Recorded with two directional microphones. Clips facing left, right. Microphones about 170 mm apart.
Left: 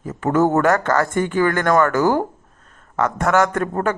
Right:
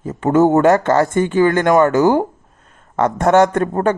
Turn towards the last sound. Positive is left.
turn(degrees=-25)  # may be behind; listen again after turning